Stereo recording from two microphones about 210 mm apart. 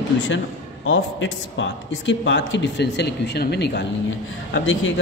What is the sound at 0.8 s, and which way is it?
Speech, 65° left (ahead or behind).